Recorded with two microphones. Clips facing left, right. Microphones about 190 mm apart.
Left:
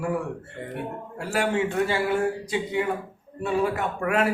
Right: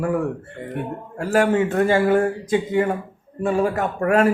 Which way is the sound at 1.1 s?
50° right (ahead or behind).